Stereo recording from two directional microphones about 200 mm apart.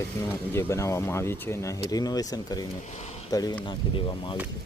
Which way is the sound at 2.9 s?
35° left (ahead or behind).